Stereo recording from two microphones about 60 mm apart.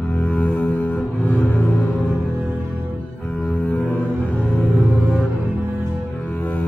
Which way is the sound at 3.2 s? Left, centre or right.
Left.